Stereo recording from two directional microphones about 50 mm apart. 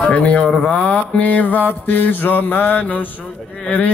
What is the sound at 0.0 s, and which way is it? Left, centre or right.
Mantra, left.